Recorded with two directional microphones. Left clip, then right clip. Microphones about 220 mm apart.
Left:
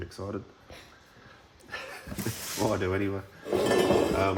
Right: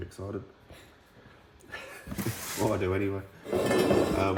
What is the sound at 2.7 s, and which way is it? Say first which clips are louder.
Speech: even; 15° left (ahead or behind).